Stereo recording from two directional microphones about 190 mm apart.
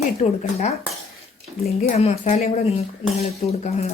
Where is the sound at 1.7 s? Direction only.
35° left (ahead or behind).